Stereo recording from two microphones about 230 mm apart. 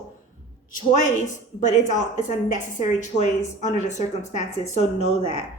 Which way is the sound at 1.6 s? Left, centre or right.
Left.